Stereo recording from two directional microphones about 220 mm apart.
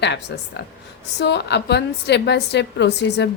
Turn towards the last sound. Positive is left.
turn(degrees=50)  # may be behind; listen again after turning